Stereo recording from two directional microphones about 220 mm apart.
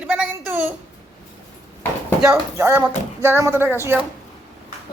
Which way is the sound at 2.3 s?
10° right (ahead or behind).